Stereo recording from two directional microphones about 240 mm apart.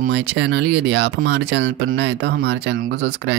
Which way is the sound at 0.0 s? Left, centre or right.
Right.